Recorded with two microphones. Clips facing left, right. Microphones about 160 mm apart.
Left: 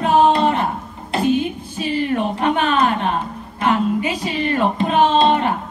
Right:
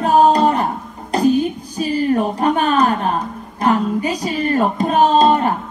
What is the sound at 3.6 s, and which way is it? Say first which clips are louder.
Child singing: right 1 dB; 40° right (ahead or behind).